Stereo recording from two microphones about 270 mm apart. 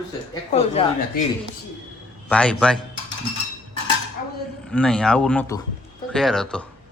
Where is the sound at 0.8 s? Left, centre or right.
Left.